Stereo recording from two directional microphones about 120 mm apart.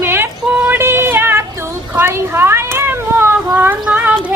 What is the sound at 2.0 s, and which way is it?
Speech, 20° right (ahead or behind).